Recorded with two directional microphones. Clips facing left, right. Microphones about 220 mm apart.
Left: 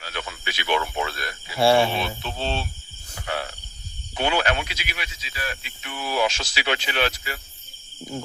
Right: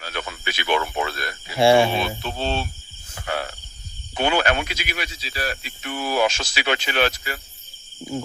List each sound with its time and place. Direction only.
0.0 s a sound: 50° right (ahead or behind)
1.5 s speech: 15° right (ahead or behind)
2.0 s speech: 45° right (ahead or behind)
3.2 s cricket: 50° right (ahead or behind)
4.1 s speech: 50° right (ahead or behind)